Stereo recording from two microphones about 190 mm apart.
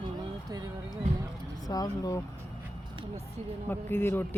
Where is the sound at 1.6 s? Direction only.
20° left (ahead or behind).